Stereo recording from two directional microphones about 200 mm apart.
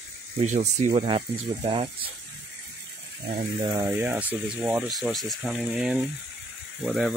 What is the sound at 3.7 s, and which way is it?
Speech, 15° right (ahead or behind).